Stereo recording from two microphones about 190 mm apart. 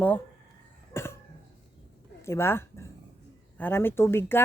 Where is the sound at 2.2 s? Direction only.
15° left (ahead or behind).